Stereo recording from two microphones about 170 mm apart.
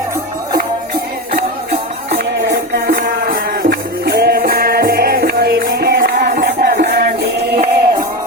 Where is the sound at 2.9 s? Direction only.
65° right (ahead or behind).